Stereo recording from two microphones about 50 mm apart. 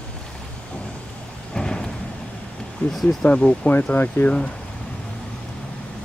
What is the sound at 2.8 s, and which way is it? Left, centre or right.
Speech, left.